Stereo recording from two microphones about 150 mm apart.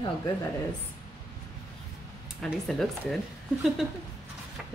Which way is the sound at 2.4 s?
5° left (ahead or behind).